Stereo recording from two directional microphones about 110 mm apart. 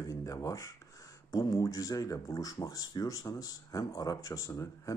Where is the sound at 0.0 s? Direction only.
30° left (ahead or behind).